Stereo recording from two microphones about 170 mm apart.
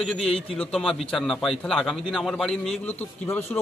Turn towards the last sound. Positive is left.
turn(degrees=10)  # may be behind; listen again after turning